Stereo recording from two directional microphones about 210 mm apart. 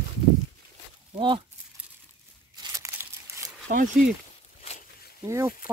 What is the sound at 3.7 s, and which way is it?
Speech, 40° right (ahead or behind).